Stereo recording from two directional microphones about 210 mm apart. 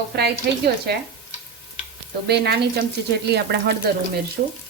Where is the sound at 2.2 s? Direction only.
50° right (ahead or behind).